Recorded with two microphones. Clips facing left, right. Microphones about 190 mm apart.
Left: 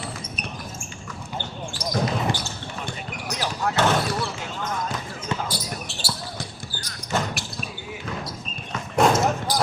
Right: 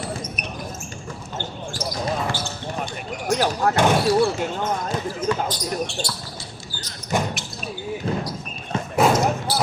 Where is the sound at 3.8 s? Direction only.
15° right (ahead or behind).